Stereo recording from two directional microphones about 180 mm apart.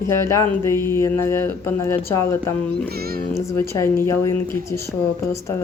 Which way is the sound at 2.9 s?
60° right (ahead or behind).